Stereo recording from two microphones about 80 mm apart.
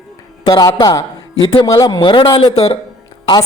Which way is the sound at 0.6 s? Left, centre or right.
Left.